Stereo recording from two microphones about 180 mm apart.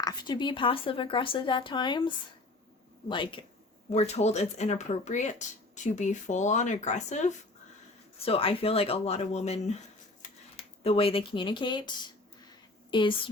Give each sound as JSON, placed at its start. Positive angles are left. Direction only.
{"t": 0.0, "sound": "a woman's voice", "side_deg": 25}
{"t": 3.9, "sound": "speech", "side_deg": 35}
{"t": 12.9, "sound": "a woman's voice", "side_deg": 25}